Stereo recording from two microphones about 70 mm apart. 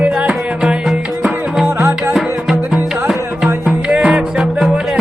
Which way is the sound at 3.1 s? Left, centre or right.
Centre.